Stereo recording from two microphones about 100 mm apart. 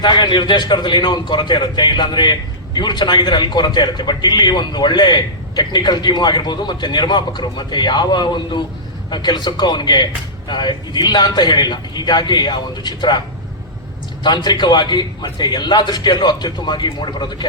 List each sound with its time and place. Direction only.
0.0 s a man's voice: 50° left (ahead or behind)
14.3 s a man's voice: 45° left (ahead or behind)